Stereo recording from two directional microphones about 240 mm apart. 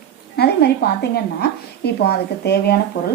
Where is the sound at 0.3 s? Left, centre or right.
Left.